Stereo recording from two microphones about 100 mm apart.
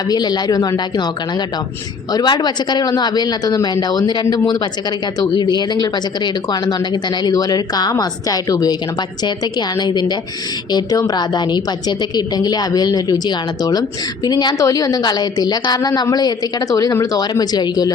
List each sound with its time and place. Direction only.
0.1 s a woman's voice: 45° left (ahead or behind)
14.6 s a woman's voice: 35° left (ahead or behind)